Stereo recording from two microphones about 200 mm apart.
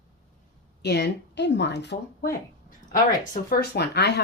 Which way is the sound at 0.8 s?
55° left (ahead or behind).